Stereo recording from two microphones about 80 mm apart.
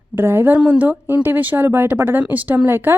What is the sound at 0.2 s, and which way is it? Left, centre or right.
A woman's voice, right.